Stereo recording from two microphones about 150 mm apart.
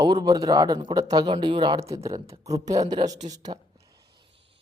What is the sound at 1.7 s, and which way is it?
Speech, 20° right (ahead or behind).